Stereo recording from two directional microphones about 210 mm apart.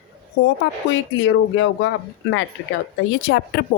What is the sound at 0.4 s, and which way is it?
Speech, 65° left (ahead or behind).